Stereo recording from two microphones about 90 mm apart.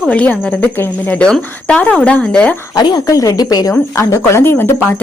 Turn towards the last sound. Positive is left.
turn(degrees=25)  # may be behind; listen again after turning